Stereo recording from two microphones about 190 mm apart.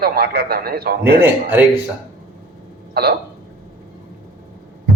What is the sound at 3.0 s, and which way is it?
Speech, 55° right (ahead or behind).